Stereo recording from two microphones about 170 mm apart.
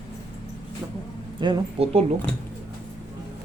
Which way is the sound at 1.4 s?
30° right (ahead or behind).